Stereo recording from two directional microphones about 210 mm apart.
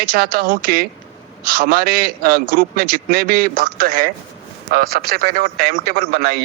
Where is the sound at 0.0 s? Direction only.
45° right (ahead or behind).